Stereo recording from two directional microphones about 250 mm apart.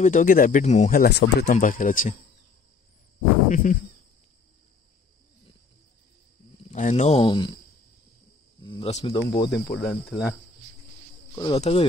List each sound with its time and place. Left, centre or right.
0.0 s speech: left
3.4 s a sound: left
6.7 s speech: left
8.6 s speech: left
9.5 s speech: centre
11.3 s speech: centre